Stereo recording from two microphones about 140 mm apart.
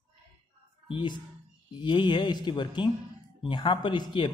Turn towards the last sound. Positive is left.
turn(degrees=35)  # may be behind; listen again after turning